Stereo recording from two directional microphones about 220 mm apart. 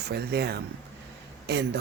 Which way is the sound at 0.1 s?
50° right (ahead or behind).